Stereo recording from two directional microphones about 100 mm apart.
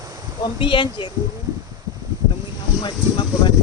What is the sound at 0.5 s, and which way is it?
Speech, 60° left (ahead or behind).